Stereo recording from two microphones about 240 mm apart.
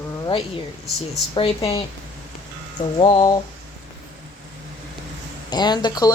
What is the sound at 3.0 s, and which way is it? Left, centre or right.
Speech, centre.